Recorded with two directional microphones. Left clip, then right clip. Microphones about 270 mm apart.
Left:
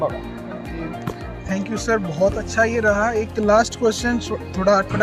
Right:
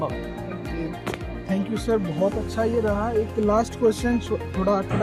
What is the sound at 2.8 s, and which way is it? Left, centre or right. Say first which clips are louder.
Speech: left 7 dB; centre.